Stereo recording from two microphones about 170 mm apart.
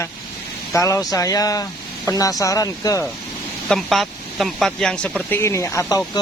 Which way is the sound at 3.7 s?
Centre (ahead or behind).